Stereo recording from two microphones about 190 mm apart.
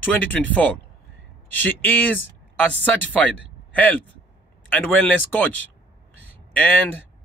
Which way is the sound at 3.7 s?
10° left (ahead or behind).